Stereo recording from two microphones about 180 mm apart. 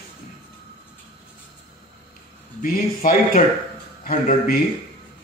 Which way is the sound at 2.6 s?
50° left (ahead or behind).